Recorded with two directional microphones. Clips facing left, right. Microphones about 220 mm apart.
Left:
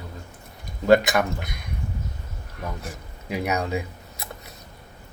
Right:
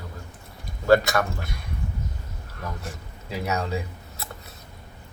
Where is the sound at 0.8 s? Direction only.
15° left (ahead or behind).